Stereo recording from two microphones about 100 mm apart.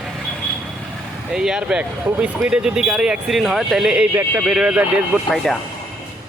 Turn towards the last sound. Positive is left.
turn(degrees=0)  # may be behind; listen again after turning